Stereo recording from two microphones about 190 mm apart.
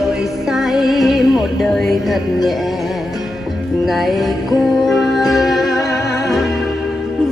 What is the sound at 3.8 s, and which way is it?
Music, centre (ahead or behind).